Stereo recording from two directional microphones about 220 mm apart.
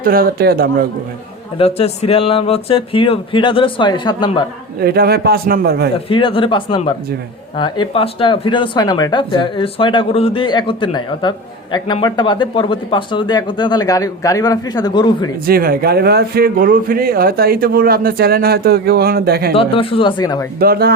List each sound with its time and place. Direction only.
0.0 s speech: 40° right (ahead or behind)
1.5 s speech: 25° left (ahead or behind)
4.8 s speech: 45° right (ahead or behind)
6.1 s speech: 25° left (ahead or behind)
15.4 s speech: 40° right (ahead or behind)
19.5 s speech: 25° left (ahead or behind)
20.6 s speech: 45° right (ahead or behind)